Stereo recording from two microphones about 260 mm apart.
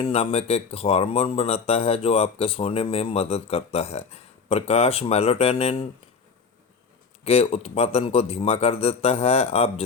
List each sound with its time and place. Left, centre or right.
0.0 s speech: left
7.3 s speech: left